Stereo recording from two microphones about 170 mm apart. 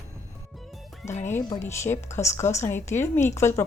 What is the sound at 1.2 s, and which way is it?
A woman's voice, 15° left (ahead or behind).